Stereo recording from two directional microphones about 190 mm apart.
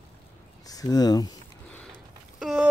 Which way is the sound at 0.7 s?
20° left (ahead or behind).